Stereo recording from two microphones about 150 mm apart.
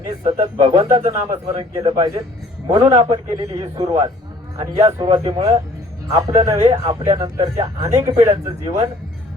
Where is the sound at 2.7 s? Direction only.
40° right (ahead or behind).